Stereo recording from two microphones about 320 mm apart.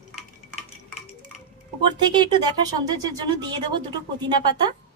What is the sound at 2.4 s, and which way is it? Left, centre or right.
Speech, centre.